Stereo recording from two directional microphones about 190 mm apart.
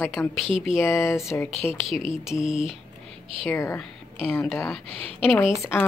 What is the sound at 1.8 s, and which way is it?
Speech, centre (ahead or behind).